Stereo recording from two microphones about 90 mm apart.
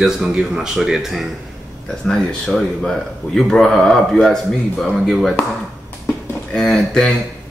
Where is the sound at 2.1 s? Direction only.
5° left (ahead or behind).